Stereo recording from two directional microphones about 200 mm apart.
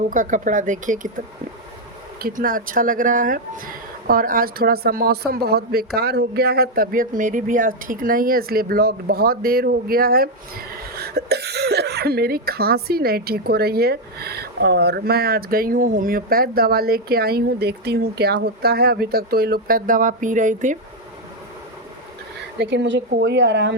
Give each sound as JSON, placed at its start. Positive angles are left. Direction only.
{"t": 0.1, "sound": "speech", "side_deg": -40}
{"t": 2.2, "sound": "speech", "side_deg": -45}
{"t": 22.5, "sound": "speech", "side_deg": -60}